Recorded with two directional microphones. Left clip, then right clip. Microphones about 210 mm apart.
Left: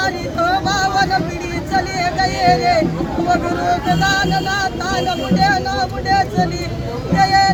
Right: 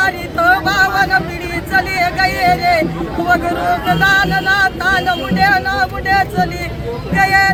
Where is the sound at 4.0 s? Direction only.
20° left (ahead or behind).